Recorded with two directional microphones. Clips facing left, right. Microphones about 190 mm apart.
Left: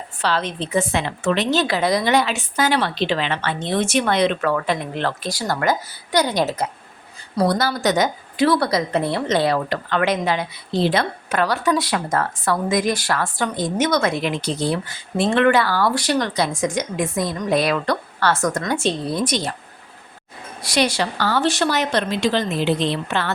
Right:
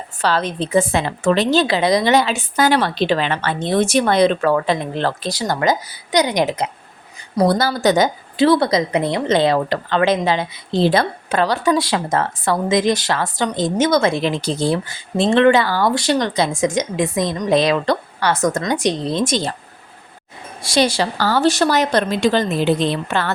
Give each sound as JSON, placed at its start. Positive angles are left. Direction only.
{"t": 0.2, "sound": "a woman's voice", "side_deg": -40}
{"t": 7.3, "sound": "speech", "side_deg": -30}
{"t": 20.6, "sound": "a woman's voice", "side_deg": -30}